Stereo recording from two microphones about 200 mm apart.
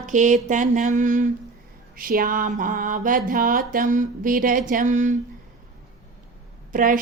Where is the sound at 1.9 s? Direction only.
45° right (ahead or behind).